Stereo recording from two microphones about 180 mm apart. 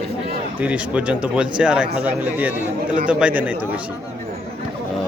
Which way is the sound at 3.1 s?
5° right (ahead or behind).